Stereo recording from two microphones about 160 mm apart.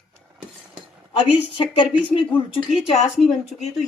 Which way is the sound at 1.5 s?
30° left (ahead or behind).